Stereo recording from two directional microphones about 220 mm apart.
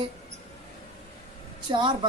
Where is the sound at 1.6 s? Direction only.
20° right (ahead or behind).